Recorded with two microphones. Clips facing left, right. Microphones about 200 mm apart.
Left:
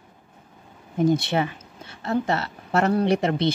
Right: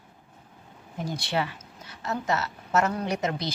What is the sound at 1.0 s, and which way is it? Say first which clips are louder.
A woman's voice: left 9 dB; 20° left (ahead or behind).